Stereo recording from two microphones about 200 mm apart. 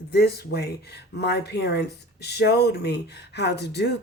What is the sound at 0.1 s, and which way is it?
Speech, 55° left (ahead or behind).